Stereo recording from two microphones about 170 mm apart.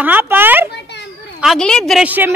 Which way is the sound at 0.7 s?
90° left.